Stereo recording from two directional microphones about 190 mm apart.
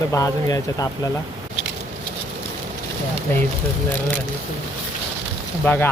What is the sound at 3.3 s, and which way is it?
Speech, 10° left (ahead or behind).